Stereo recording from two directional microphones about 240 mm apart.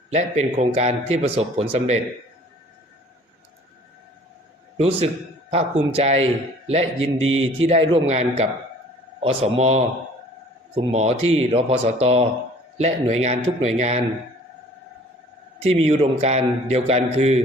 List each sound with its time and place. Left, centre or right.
0.1 s a man's voice: right
4.8 s a man's voice: right
15.8 s a man's voice: right